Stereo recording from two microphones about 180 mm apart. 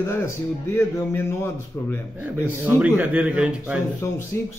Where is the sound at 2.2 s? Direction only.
10° right (ahead or behind).